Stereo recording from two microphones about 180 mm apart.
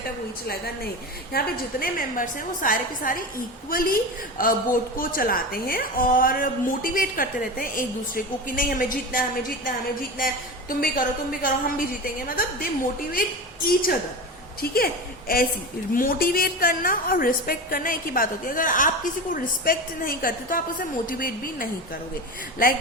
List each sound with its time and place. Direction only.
0.4 s a woman's voice: 60° left (ahead or behind)